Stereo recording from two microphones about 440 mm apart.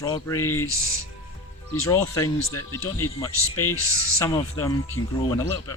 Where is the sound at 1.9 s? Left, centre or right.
Centre.